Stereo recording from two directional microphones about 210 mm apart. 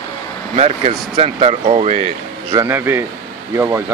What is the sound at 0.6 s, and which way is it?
Speech, 30° right (ahead or behind).